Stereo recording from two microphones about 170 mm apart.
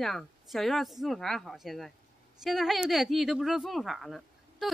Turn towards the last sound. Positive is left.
turn(degrees=0)  # may be behind; listen again after turning